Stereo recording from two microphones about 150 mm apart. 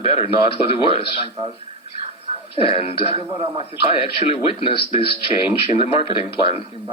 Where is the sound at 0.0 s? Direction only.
45° left (ahead or behind).